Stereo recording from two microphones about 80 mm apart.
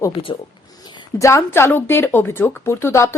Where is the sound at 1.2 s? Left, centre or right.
Left.